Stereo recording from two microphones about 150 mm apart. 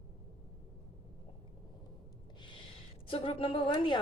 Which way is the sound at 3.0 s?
40° left (ahead or behind).